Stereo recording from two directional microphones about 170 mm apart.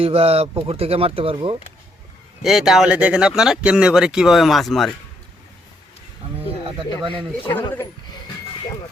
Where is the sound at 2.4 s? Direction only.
Centre (ahead or behind).